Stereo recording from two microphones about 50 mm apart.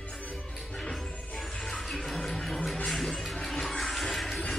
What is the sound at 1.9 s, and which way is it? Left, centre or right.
Music, centre.